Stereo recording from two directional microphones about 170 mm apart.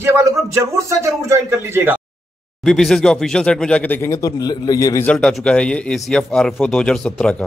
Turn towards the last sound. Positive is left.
turn(degrees=5)  # may be behind; listen again after turning